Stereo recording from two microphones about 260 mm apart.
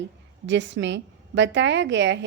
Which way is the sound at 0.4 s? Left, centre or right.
Right.